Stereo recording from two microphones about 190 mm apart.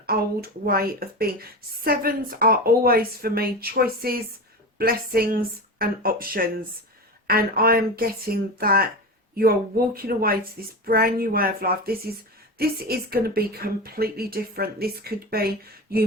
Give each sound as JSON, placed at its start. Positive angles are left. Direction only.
{"t": 0.0, "sound": "a woman's voice", "side_deg": -55}